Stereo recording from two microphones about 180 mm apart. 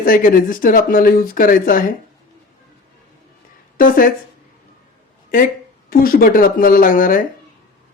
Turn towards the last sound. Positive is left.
turn(degrees=50)  # may be behind; listen again after turning